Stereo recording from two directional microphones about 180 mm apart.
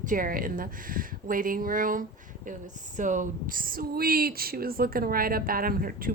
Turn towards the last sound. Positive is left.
turn(degrees=-55)  # may be behind; listen again after turning